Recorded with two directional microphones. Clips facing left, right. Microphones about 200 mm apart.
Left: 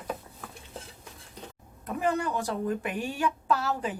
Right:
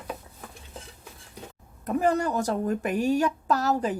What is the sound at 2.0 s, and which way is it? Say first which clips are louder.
A woman's voice: right 3 dB; 40° right (ahead or behind).